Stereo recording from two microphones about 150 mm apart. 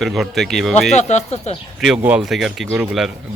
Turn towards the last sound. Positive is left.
turn(degrees=-5)  # may be behind; listen again after turning